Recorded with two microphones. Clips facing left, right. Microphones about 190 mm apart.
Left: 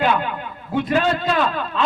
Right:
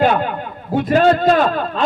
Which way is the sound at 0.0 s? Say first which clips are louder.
Right 4 dB; 45° right (ahead or behind).